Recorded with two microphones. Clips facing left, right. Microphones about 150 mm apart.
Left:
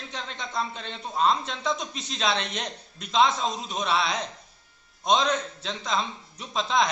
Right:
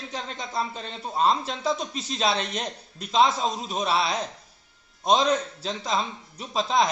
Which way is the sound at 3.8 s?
35° right (ahead or behind).